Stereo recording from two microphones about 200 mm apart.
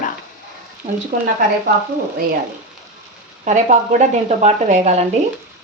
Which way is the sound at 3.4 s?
40° right (ahead or behind).